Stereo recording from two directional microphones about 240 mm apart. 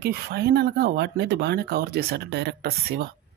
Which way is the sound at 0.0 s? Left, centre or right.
Right.